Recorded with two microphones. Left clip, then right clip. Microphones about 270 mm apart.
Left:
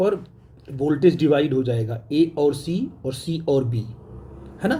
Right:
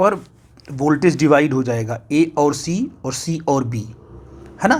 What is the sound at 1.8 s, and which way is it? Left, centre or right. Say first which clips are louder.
Speech: right 3 dB; right.